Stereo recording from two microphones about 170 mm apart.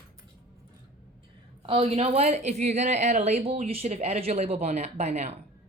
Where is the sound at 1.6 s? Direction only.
35° right (ahead or behind).